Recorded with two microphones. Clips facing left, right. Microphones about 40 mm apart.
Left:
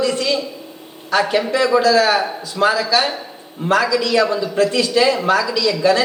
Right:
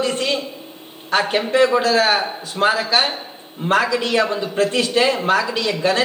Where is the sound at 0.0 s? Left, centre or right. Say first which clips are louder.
Left 2 dB; right.